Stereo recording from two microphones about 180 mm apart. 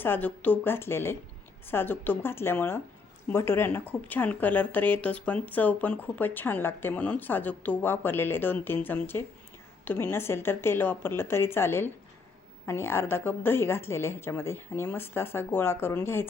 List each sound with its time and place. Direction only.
0.0 s speech: 10° left (ahead or behind)